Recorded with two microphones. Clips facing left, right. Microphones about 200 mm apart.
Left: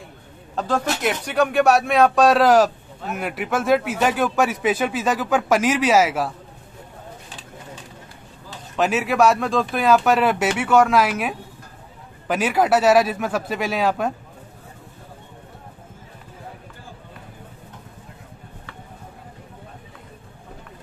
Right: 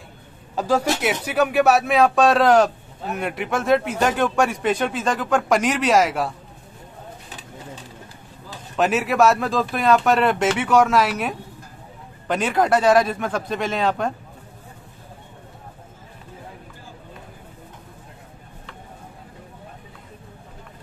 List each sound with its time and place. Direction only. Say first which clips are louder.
0.6 s speech: right 2 dB; 10° right (ahead or behind)
8.7 s speech: even; centre (ahead or behind)